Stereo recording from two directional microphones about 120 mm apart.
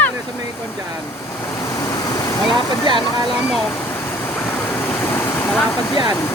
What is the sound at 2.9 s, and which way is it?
Speech, 40° right (ahead or behind).